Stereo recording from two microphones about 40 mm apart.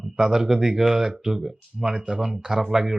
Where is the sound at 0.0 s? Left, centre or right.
Centre.